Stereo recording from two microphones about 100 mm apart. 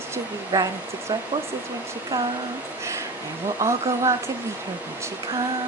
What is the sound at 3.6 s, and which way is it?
Speech, 30° right (ahead or behind).